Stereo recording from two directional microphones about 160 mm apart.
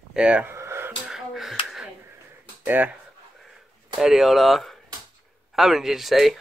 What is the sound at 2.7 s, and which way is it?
Speech, 10° right (ahead or behind).